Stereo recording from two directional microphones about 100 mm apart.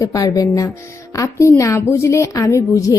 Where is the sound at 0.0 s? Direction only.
35° left (ahead or behind).